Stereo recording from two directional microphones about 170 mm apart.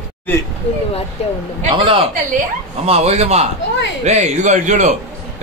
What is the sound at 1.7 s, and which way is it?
A man's voice, 30° right (ahead or behind).